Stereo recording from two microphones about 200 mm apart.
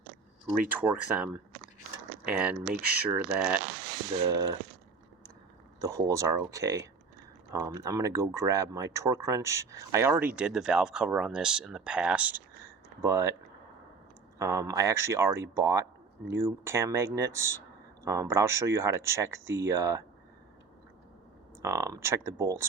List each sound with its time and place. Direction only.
0.7 s speech: 10° right (ahead or behind)
5.8 s speech: 15° right (ahead or behind)
14.3 s speech: 15° right (ahead or behind)
21.6 s speech: 15° right (ahead or behind)